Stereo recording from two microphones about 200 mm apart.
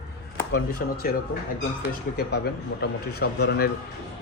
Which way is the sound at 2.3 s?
55° left (ahead or behind).